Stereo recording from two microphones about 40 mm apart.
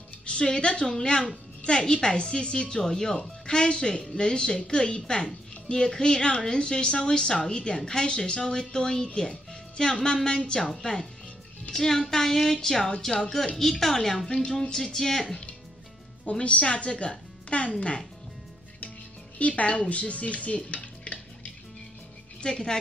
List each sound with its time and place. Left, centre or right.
0.2 s a woman's voice: left; by 14.3 s centre
14.3 s a woman's voice: left
14.8 s speech: centre
16.3 s a woman's voice: left
19.3 s speech: left
19.9 s stir: left
22.4 s a woman's voice: centre